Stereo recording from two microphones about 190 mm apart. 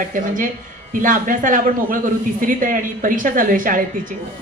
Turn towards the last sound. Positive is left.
turn(degrees=-45)  # may be behind; listen again after turning